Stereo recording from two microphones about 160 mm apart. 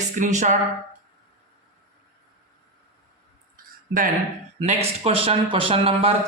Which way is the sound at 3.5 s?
55° right (ahead or behind).